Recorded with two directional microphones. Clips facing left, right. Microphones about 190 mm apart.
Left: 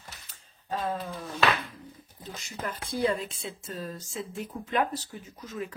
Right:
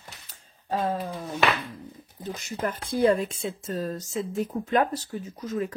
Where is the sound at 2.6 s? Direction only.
50° right (ahead or behind).